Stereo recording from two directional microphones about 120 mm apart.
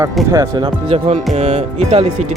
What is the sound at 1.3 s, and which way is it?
Speech, 65° right (ahead or behind).